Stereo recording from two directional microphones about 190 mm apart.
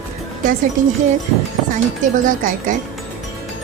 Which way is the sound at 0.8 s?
40° right (ahead or behind).